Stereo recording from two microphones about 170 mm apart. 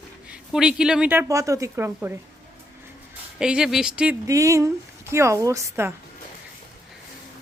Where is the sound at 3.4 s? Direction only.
5° right (ahead or behind).